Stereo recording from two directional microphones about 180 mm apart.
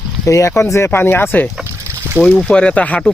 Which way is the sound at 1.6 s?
10° right (ahead or behind).